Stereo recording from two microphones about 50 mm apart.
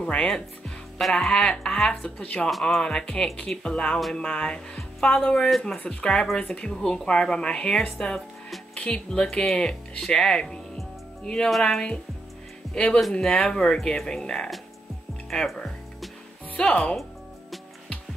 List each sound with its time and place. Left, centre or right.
0.0 s speech: centre
15.2 s music: centre
16.6 s speech: left